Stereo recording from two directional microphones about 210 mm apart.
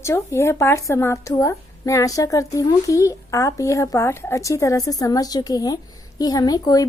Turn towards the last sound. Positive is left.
turn(degrees=15)  # may be behind; listen again after turning